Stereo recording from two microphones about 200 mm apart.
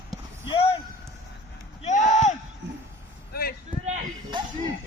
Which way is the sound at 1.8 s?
35° left (ahead or behind).